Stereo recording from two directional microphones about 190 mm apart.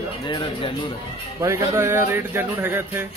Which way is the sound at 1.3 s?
15° right (ahead or behind).